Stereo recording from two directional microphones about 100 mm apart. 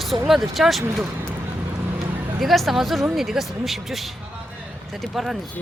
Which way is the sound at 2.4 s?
Centre (ahead or behind).